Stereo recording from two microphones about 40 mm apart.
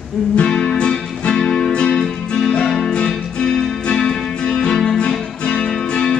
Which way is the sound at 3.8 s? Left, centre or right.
Left.